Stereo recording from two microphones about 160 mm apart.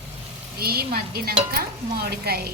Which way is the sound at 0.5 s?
75° right (ahead or behind).